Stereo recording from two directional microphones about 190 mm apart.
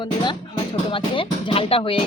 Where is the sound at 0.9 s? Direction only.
30° left (ahead or behind).